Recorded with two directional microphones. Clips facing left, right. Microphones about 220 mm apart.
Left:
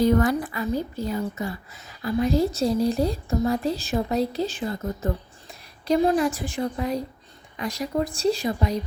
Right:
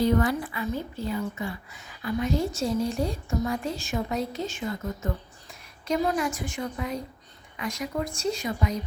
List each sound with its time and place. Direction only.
0.0 s a woman's voice: 45° left (ahead or behind)